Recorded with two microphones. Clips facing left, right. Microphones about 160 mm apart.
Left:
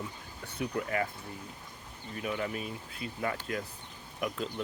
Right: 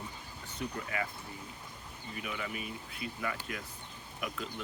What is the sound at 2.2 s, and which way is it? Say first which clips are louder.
Speech: left 6 dB; 40° left (ahead or behind).